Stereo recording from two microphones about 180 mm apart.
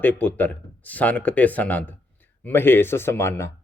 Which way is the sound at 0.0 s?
10° left (ahead or behind).